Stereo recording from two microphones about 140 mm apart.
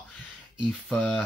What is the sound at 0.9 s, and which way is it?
Speech, 10° left (ahead or behind).